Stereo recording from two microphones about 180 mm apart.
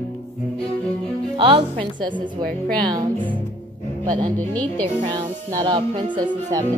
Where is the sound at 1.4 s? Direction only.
30° right (ahead or behind).